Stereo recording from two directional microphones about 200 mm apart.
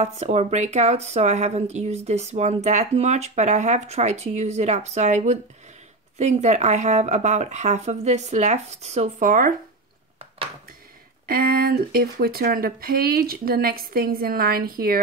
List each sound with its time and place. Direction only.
0.0 s speech: 30° right (ahead or behind)
11.2 s speech: 45° right (ahead or behind)